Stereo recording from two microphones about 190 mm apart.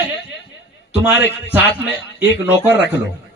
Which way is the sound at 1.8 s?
10° right (ahead or behind).